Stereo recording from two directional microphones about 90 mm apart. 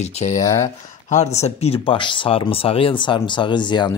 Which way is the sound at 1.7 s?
70° left (ahead or behind).